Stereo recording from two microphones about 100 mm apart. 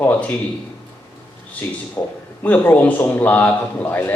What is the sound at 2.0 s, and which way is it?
A man's voice, 20° left (ahead or behind).